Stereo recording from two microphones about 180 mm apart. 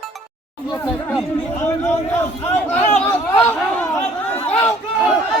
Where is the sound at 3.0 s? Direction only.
15° left (ahead or behind).